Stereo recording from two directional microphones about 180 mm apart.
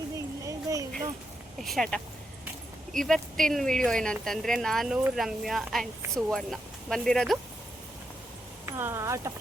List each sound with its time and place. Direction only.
0.2 s a sound: 20° right (ahead or behind)
1.6 s speech: centre (ahead or behind)
8.6 s speech: 15° right (ahead or behind)